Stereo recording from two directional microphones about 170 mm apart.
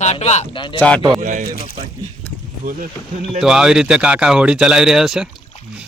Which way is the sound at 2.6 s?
55° right (ahead or behind).